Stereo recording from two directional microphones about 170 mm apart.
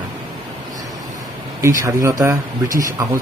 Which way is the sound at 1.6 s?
15° right (ahead or behind).